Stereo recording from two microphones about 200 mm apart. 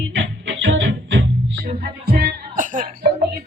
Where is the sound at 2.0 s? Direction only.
50° right (ahead or behind).